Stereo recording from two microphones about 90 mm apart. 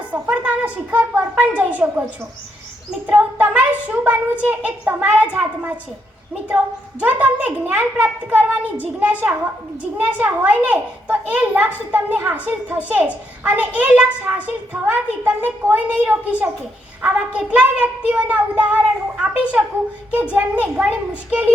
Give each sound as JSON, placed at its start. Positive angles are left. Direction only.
{"t": 0.1, "sound": "a child's voice", "side_deg": -15}
{"t": 3.1, "sound": "a child's voice", "side_deg": -15}
{"t": 7.0, "sound": "a child's voice", "side_deg": -15}